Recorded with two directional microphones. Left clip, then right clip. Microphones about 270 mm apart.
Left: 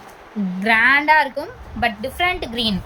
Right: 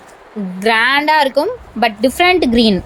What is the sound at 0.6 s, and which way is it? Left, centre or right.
A woman's voice, right.